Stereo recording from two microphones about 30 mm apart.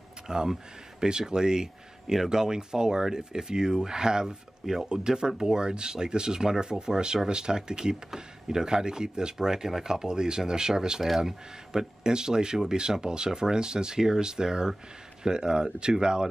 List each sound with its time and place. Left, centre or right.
0.3 s speech: right